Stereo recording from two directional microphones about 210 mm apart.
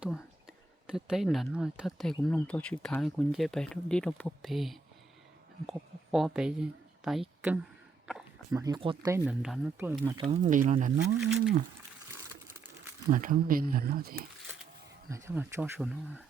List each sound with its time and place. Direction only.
0.0 s speech: 5° right (ahead or behind)
8.4 s speech: 15° right (ahead or behind)
9.1 s speech: 5° right (ahead or behind)
10.2 s speech: 30° right (ahead or behind)
13.1 s speech: 40° right (ahead or behind)
15.1 s speech: 15° right (ahead or behind)